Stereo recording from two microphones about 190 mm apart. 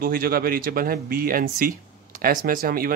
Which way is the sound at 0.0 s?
50° right (ahead or behind).